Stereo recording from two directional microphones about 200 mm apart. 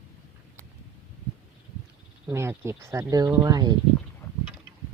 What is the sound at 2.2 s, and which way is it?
Speech, 15° right (ahead or behind).